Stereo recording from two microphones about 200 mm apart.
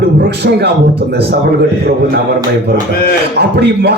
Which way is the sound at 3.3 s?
55° right (ahead or behind).